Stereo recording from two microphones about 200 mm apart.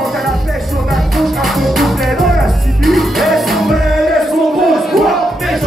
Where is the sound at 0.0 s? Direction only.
Centre (ahead or behind).